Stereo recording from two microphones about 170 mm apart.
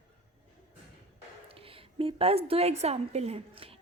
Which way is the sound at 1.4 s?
35° right (ahead or behind).